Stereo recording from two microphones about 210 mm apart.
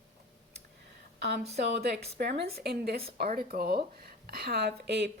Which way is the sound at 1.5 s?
50° right (ahead or behind).